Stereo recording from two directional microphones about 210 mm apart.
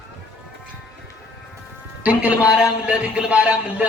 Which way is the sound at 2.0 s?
5° right (ahead or behind).